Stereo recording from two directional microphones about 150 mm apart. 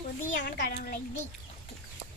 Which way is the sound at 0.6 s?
65° left (ahead or behind).